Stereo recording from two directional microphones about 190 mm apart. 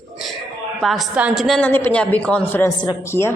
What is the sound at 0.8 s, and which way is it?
A woman's voice, centre (ahead or behind).